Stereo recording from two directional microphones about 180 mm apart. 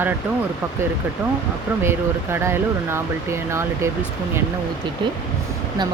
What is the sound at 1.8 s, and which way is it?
Speech, 15° right (ahead or behind).